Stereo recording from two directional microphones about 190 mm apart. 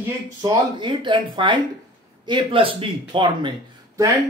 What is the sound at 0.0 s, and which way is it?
Speech, 20° right (ahead or behind).